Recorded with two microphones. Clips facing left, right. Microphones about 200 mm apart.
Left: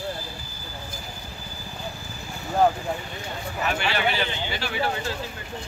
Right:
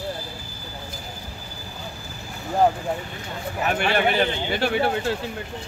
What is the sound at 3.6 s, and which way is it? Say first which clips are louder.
Speech: right 4 dB; 50° right (ahead or behind).